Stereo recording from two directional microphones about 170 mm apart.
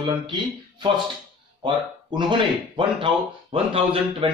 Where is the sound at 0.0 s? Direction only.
25° right (ahead or behind).